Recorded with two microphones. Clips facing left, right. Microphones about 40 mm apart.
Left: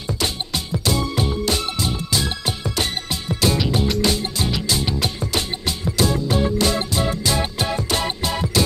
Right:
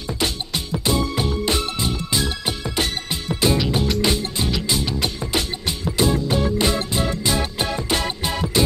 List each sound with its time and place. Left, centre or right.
0.2 s music: centre
3.5 s music: centre
4.0 s music: right